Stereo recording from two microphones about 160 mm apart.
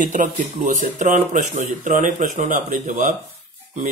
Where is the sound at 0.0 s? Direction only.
55° right (ahead or behind).